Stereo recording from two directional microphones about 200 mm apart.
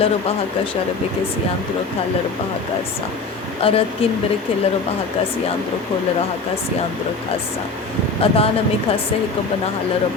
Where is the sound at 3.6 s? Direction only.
30° left (ahead or behind).